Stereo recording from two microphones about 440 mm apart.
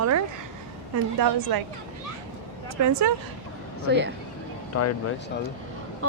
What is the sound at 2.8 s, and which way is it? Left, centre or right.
Speech, right.